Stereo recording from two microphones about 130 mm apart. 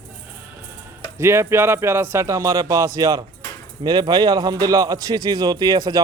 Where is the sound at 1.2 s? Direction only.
20° right (ahead or behind).